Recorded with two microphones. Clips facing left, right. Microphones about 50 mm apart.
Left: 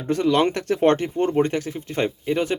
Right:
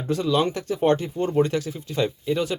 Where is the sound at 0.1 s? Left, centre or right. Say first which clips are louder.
Left 3 dB; left.